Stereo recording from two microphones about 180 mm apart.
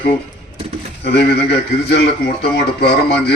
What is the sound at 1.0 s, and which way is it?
A man's voice, 65° left (ahead or behind).